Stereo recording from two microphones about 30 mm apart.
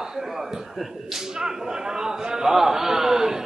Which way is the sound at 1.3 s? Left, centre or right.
Right.